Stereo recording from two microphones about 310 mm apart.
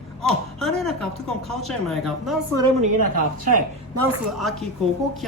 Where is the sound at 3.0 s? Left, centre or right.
Right.